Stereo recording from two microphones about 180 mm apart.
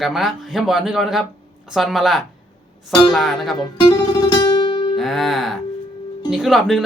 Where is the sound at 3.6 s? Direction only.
25° left (ahead or behind).